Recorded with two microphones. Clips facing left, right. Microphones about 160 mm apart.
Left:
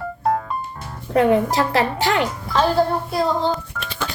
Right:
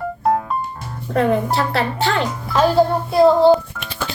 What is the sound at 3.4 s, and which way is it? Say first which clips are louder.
Telephone dialing: right 10 dB; 10° right (ahead or behind).